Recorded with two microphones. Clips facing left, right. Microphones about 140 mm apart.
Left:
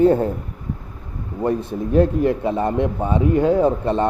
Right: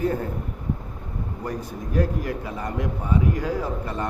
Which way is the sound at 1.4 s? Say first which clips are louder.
Left 12 dB; 25° left (ahead or behind).